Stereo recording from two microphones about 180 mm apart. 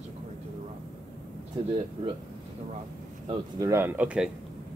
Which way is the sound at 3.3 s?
20° right (ahead or behind).